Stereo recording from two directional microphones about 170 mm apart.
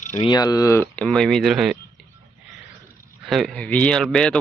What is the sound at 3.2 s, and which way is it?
Speech, centre (ahead or behind).